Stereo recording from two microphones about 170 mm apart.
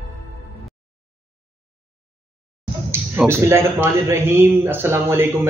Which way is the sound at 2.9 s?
15° right (ahead or behind).